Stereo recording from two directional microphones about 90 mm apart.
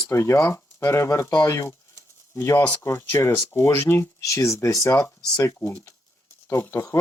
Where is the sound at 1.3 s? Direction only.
35° left (ahead or behind).